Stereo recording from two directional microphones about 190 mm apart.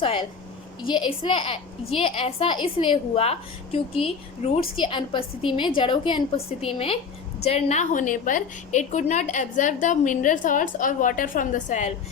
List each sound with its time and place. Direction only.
0.0 s a woman's voice: 30° left (ahead or behind)